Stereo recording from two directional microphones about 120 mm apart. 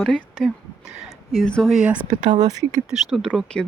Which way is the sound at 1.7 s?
10° right (ahead or behind).